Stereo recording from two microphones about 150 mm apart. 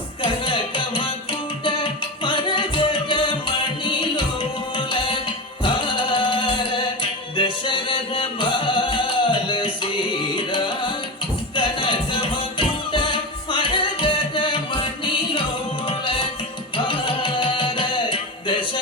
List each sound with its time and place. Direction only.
0.2 s music: 35° left (ahead or behind)
16.7 s music: 35° left (ahead or behind)